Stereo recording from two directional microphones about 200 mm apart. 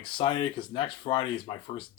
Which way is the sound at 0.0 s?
25° left (ahead or behind).